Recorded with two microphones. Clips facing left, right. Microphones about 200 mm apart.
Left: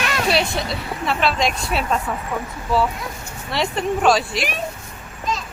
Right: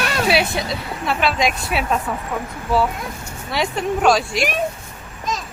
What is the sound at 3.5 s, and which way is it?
Speech, centre (ahead or behind).